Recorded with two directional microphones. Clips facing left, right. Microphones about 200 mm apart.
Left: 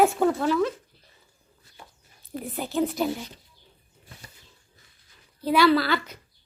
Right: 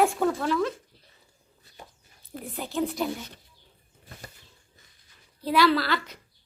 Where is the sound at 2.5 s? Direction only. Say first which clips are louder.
Left 2 dB; centre (ahead or behind).